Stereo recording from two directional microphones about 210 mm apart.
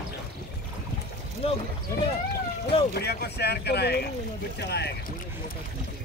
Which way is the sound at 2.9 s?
50° left (ahead or behind).